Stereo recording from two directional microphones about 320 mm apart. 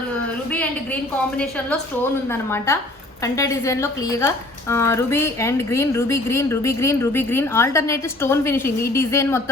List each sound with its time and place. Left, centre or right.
2.3 s speech: centre